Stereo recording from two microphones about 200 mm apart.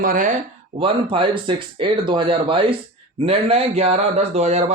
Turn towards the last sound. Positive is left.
turn(degrees=-35)  # may be behind; listen again after turning